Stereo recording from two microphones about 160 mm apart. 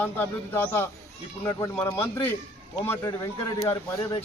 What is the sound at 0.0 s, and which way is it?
A man's voice, 10° left (ahead or behind).